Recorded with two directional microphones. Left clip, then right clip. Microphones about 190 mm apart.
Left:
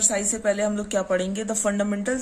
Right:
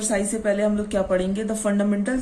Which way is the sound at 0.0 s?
35° left (ahead or behind).